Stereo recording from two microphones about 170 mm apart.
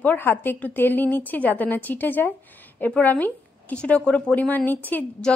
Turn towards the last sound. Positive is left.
turn(degrees=10)  # may be behind; listen again after turning